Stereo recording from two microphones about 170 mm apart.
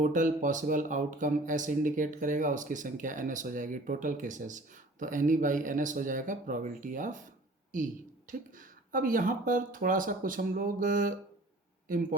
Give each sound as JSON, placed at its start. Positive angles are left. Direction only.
{"t": 0.0, "sound": "speech", "side_deg": -50}